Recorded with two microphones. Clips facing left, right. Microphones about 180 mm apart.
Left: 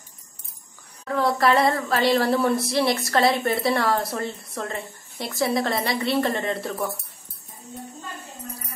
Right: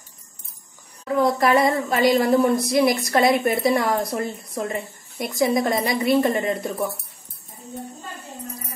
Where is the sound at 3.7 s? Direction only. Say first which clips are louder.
Right 1 dB; 20° right (ahead or behind).